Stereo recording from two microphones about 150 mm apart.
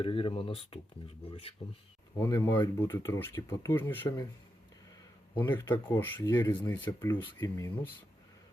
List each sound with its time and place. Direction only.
0.0 s speech: 35° left (ahead or behind)
2.1 s speech: 20° left (ahead or behind)
5.3 s speech: 15° left (ahead or behind)